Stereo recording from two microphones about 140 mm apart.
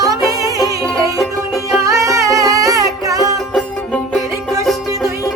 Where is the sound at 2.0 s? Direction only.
25° right (ahead or behind).